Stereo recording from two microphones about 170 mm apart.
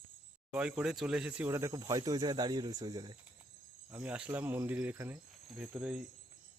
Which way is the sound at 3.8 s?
10° right (ahead or behind).